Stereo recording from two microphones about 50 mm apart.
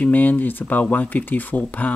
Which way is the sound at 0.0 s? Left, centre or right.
Left.